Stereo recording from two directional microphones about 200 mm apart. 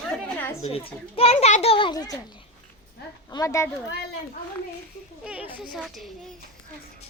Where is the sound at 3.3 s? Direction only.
15° left (ahead or behind).